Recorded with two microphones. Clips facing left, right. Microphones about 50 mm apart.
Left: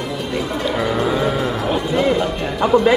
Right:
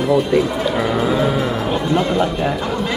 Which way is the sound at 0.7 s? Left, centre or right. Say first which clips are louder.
Right 1 dB; centre.